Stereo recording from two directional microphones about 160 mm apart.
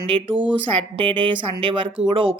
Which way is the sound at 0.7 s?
30° right (ahead or behind).